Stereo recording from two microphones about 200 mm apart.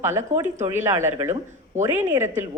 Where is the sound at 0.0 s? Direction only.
15° right (ahead or behind).